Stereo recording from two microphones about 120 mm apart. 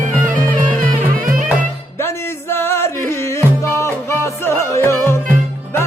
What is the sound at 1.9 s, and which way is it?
Music, 20° left (ahead or behind).